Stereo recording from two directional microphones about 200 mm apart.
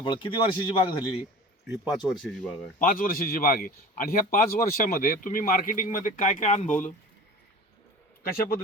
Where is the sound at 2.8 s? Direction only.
45° left (ahead or behind).